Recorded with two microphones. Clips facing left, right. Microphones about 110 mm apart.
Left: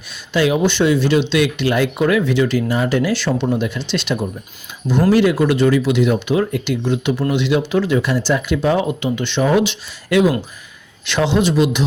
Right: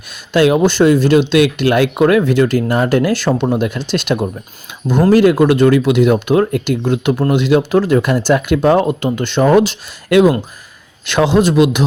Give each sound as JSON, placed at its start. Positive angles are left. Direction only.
{"t": 0.3, "sound": "speech", "side_deg": -55}
{"t": 11.5, "sound": "a man's voice", "side_deg": -55}